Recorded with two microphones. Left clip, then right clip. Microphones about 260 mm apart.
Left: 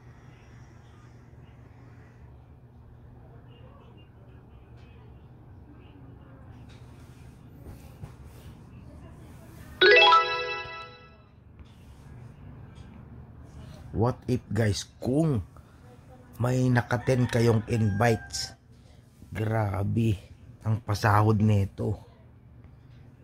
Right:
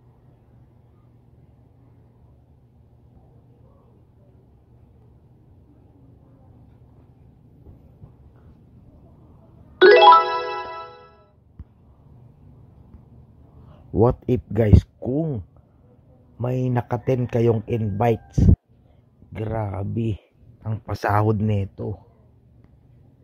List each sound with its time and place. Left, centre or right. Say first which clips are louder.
9.8 s music: right 7 dB; centre
13.9 s speech: right 9 dB; right
15.0 s speech: right 1 dB; centre
16.4 s speech: right 2 dB; centre